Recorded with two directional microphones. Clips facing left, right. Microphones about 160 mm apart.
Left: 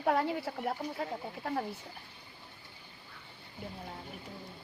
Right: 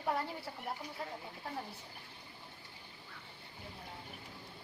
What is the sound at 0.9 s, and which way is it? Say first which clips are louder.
Speech: left 7 dB; 60° left (ahead or behind).